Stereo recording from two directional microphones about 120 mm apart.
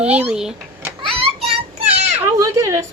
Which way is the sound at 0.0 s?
10° right (ahead or behind).